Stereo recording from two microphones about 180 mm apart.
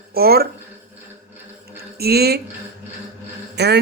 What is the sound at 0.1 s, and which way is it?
Speech, 60° right (ahead or behind).